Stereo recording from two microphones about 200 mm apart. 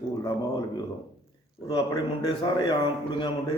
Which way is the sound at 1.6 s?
20° left (ahead or behind).